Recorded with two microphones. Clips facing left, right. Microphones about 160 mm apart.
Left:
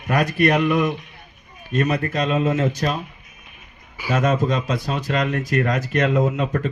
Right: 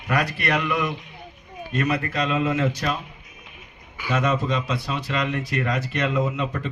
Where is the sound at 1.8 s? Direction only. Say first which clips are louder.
Left 3 dB; 45° left (ahead or behind).